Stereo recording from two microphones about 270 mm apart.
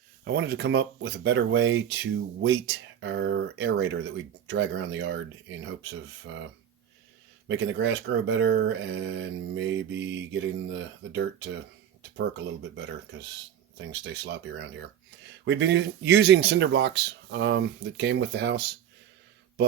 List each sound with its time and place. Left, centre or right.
0.3 s speech: right
7.4 s speech: right
14.0 s speech: right